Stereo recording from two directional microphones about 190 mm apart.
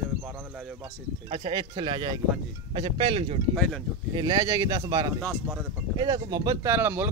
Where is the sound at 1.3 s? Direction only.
25° right (ahead or behind).